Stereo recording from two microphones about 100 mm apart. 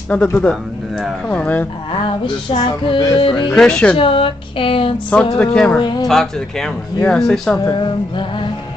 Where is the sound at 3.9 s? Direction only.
65° left (ahead or behind).